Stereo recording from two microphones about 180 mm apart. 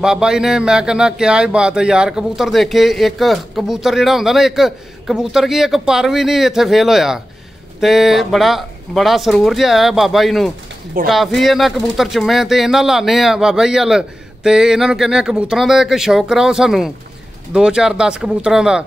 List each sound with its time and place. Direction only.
0.0 s speech: 5° right (ahead or behind)